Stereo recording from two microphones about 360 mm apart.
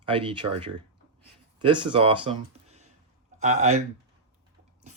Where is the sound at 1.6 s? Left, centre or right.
Centre.